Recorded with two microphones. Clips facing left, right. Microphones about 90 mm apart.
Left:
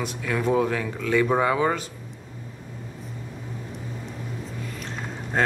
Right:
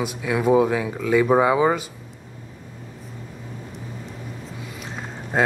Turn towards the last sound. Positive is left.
turn(degrees=-5)  # may be behind; listen again after turning